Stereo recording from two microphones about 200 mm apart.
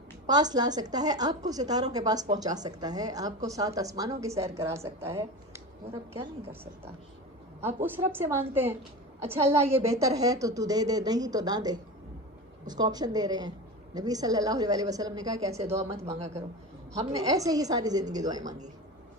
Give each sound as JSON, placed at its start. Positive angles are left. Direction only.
{"t": 0.3, "sound": "a woman's voice", "side_deg": -20}
{"t": 7.8, "sound": "a woman's voice", "side_deg": -10}
{"t": 15.6, "sound": "speech", "side_deg": -30}
{"t": 17.2, "sound": "speech", "side_deg": -15}